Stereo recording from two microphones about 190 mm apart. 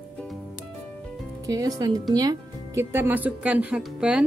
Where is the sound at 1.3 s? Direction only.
20° right (ahead or behind).